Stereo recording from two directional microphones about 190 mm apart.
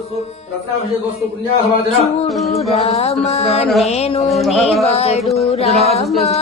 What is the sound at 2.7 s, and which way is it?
Music, 35° left (ahead or behind).